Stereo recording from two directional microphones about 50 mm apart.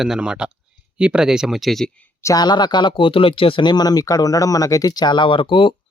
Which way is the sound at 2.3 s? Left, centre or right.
Left.